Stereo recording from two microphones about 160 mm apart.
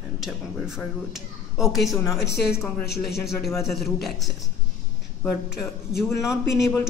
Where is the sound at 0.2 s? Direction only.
5° right (ahead or behind).